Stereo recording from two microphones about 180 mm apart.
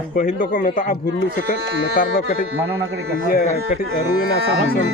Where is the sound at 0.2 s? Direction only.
45° left (ahead or behind).